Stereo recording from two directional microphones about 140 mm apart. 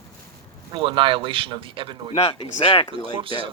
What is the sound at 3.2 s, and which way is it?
Speech, 40° right (ahead or behind).